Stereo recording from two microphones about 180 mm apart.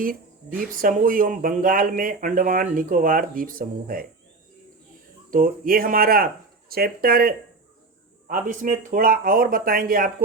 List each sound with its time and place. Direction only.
0.6 s speech: 50° right (ahead or behind)
5.3 s speech: 50° right (ahead or behind)